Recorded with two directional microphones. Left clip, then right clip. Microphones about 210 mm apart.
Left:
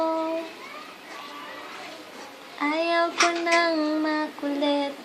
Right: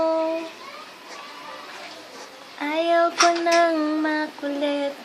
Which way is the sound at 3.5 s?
25° right (ahead or behind).